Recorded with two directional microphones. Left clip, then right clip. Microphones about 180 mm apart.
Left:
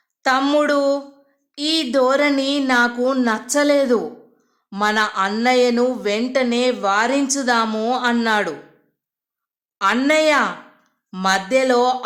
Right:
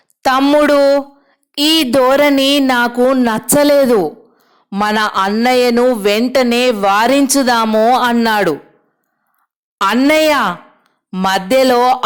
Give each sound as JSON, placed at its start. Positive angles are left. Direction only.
{"t": 0.2, "sound": "a sound", "side_deg": -45}
{"t": 0.6, "sound": "a woman's voice", "side_deg": -40}
{"t": 9.7, "sound": "a woman's voice", "side_deg": -50}